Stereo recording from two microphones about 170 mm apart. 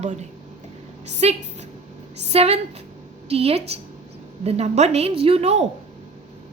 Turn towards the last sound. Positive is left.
turn(degrees=-40)  # may be behind; listen again after turning